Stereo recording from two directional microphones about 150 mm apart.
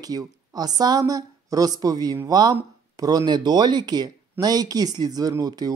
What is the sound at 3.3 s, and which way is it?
Speech, 30° right (ahead or behind).